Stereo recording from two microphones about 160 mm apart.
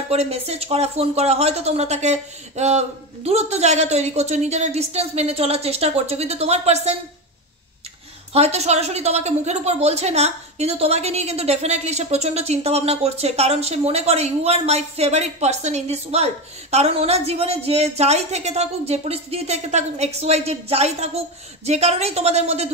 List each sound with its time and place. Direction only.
0.1 s a woman's voice: 40° right (ahead or behind)
8.3 s a woman's voice: 40° right (ahead or behind)